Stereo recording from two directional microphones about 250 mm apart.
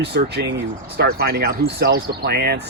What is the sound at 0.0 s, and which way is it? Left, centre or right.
Speech, right.